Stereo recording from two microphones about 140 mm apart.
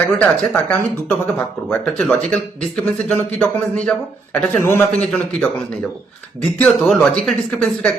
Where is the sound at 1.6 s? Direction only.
5° left (ahead or behind).